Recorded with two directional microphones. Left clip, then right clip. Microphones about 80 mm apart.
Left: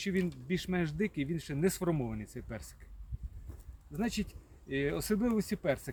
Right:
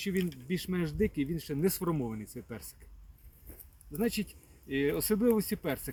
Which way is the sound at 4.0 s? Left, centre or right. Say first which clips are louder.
Right 4 dB; left.